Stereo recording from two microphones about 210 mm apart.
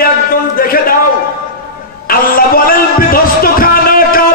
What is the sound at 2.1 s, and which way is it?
Speech, 45° left (ahead or behind).